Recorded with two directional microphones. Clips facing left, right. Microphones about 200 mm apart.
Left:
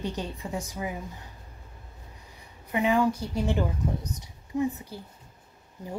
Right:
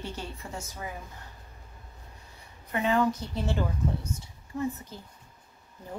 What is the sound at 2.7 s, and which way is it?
A woman's voice, 15° left (ahead or behind).